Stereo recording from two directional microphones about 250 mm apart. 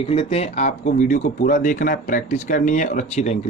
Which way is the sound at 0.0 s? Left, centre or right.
Left.